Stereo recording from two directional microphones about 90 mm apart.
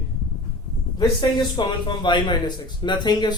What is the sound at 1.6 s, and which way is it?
Speech, 60° left (ahead or behind).